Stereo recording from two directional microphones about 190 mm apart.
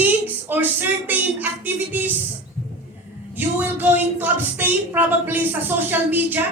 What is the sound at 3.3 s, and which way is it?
A woman's voice, 10° right (ahead or behind).